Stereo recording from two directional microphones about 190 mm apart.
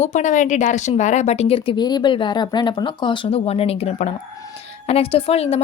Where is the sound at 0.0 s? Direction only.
40° left (ahead or behind).